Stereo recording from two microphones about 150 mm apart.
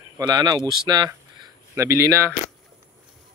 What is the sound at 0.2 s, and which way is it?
Speech, 25° right (ahead or behind).